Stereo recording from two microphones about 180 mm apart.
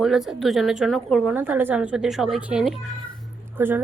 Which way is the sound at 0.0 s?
Centre (ahead or behind).